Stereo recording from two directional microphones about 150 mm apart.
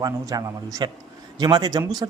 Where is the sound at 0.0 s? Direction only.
25° right (ahead or behind).